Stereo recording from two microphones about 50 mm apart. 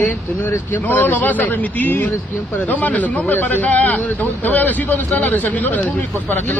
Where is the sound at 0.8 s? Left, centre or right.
Left.